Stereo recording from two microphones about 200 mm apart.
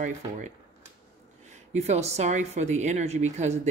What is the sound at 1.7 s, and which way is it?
Speech, 35° right (ahead or behind).